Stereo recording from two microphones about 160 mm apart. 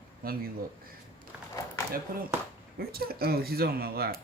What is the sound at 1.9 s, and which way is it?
Speech, 65° right (ahead or behind).